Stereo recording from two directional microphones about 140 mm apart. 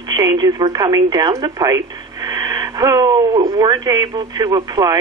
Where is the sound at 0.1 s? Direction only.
30° right (ahead or behind).